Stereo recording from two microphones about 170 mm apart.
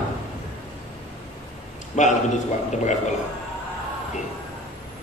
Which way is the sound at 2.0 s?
45° left (ahead or behind).